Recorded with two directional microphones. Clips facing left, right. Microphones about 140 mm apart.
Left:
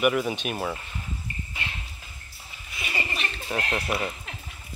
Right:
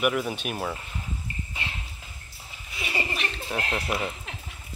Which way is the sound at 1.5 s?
5° right (ahead or behind).